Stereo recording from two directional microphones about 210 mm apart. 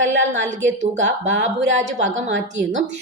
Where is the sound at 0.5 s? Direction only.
35° right (ahead or behind).